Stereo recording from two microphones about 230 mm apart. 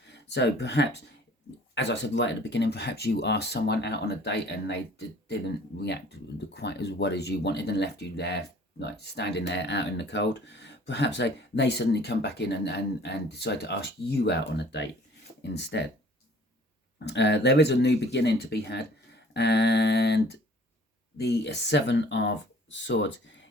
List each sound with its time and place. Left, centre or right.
0.1 s speech: left
17.1 s speech: left